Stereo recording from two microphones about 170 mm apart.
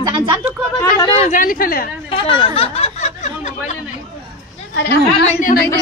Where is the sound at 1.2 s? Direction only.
50° left (ahead or behind).